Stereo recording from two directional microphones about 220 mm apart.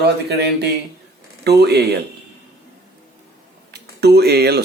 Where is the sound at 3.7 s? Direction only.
50° right (ahead or behind).